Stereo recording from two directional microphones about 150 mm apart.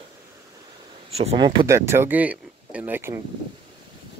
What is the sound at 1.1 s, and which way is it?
Speech, 45° right (ahead or behind).